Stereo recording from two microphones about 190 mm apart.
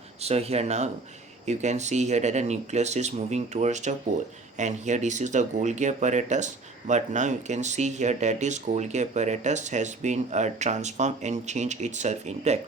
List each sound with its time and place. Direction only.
0.2 s speech: 35° right (ahead or behind)